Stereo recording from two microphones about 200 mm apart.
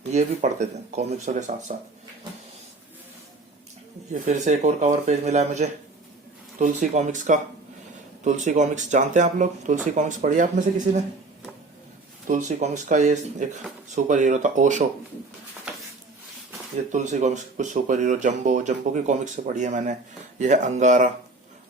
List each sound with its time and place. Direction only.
0.1 s speech: 35° right (ahead or behind)
4.1 s speech: 35° right (ahead or behind)
12.3 s speech: 35° right (ahead or behind)
16.9 s speech: 35° right (ahead or behind)